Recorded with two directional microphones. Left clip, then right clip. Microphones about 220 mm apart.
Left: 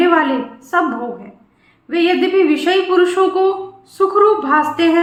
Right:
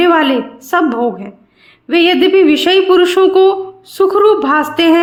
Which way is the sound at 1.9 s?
45° right (ahead or behind).